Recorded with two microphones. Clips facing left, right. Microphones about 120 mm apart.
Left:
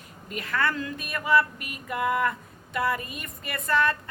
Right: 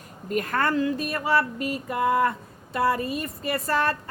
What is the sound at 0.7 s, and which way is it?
A woman's voice, 30° right (ahead or behind).